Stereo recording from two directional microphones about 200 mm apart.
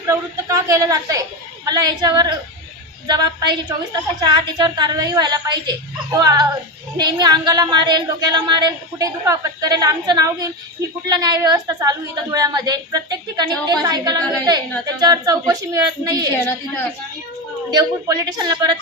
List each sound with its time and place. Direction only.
0.1 s a woman's voice: 15° right (ahead or behind)
17.7 s a woman's voice: 20° right (ahead or behind)